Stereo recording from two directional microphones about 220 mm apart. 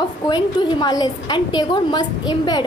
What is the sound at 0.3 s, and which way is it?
A woman's voice, 20° left (ahead or behind).